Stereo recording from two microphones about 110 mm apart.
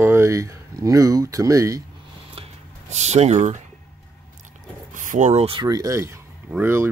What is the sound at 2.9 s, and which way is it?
Speech, 90° right.